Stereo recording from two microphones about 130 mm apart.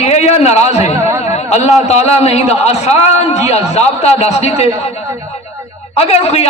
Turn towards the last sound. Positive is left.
turn(degrees=55)  # may be behind; listen again after turning